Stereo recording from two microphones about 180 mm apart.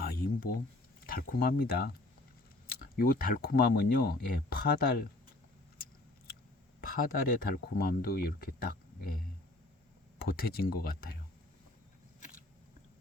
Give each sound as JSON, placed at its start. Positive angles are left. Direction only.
{"t": 0.0, "sound": "a sound", "side_deg": 55}
{"t": 1.0, "sound": "speech", "side_deg": 55}
{"t": 7.1, "sound": "speech", "side_deg": 55}